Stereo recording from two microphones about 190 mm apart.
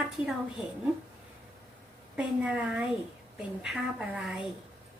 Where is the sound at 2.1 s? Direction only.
5° right (ahead or behind).